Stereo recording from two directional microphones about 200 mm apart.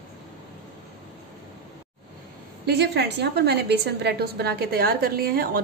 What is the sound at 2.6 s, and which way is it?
A woman's voice, 55° right (ahead or behind).